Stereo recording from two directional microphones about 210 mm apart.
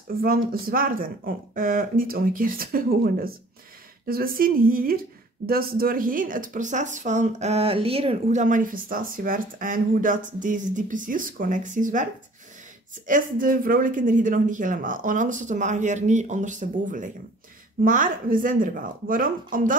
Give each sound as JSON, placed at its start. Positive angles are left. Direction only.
{"t": 0.2, "sound": "speech", "side_deg": -45}